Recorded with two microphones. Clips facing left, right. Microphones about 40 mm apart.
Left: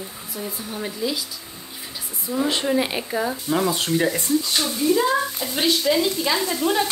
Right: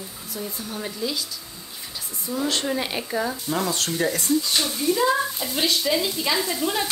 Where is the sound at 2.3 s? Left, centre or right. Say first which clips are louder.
Left 4 dB; centre.